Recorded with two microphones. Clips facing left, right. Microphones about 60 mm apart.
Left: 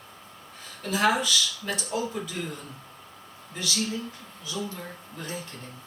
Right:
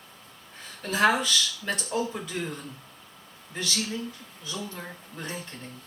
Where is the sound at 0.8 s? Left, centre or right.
Right.